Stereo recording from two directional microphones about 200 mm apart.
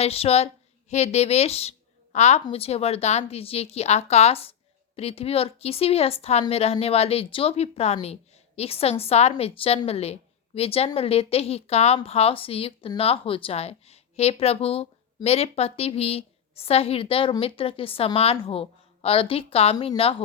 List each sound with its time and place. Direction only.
0.0 s a woman's voice: 30° left (ahead or behind)